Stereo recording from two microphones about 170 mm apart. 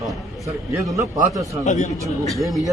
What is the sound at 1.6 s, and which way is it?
Speech, 45° left (ahead or behind).